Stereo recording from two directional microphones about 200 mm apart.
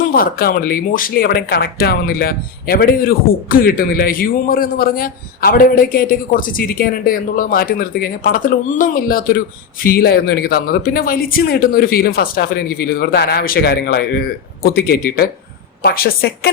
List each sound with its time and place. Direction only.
0.0 s speech: 45° left (ahead or behind)